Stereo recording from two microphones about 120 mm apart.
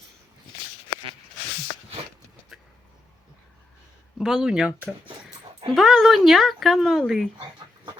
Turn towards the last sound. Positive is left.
turn(degrees=-40)  # may be behind; listen again after turning